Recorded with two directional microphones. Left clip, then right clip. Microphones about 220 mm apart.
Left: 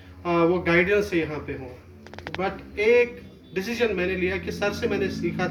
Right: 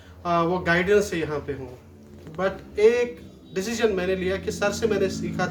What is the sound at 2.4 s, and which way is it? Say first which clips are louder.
Speech: right 4 dB; 25° right (ahead or behind).